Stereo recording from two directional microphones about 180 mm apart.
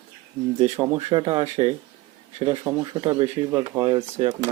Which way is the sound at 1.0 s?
25° right (ahead or behind).